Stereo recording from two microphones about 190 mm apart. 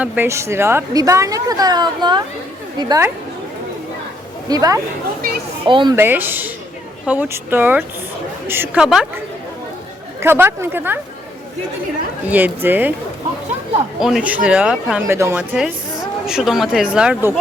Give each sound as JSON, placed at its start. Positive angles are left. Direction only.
{"t": 0.0, "sound": "a woman's voice", "side_deg": -10}
{"t": 4.4, "sound": "a woman's voice", "side_deg": -20}
{"t": 6.0, "sound": "a woman's voice", "side_deg": -10}
{"t": 10.2, "sound": "a woman's voice", "side_deg": -10}
{"t": 12.3, "sound": "a woman's voice", "side_deg": -10}
{"t": 14.0, "sound": "a woman's voice", "side_deg": -5}